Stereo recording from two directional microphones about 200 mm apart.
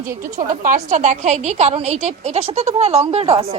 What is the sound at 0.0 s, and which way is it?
A woman's voice, 45° right (ahead or behind).